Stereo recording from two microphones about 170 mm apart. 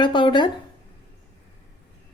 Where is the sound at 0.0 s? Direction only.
30° left (ahead or behind).